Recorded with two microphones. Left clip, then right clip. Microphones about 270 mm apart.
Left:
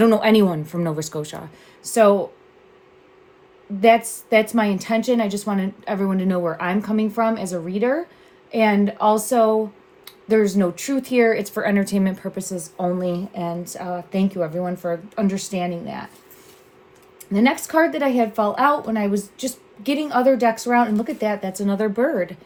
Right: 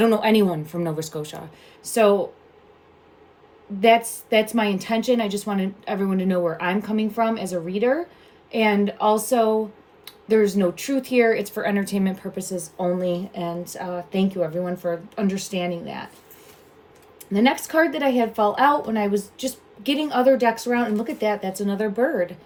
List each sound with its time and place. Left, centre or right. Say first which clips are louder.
0.0 s speech: left 3 dB; left
3.8 s speech: left 2 dB; left
17.3 s speech: left 1 dB; left